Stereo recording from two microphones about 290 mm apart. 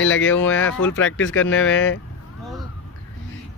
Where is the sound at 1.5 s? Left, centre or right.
Centre.